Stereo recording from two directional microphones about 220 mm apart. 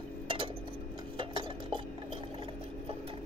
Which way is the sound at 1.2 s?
20° right (ahead or behind).